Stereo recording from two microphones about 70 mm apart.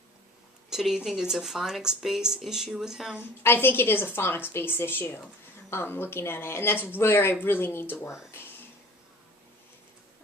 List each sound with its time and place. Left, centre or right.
0.7 s speech: centre
3.2 s speech: left